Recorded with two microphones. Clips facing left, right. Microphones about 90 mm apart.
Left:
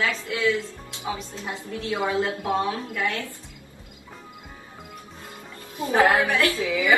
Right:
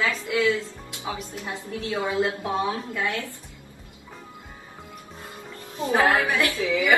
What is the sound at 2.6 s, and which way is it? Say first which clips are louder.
Speech: even; 20° right (ahead or behind).